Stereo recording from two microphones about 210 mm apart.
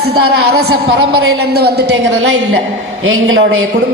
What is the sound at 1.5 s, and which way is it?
Speech, 50° right (ahead or behind).